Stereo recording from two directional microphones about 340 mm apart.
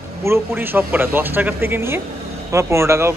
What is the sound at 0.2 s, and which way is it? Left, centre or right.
Speech, centre.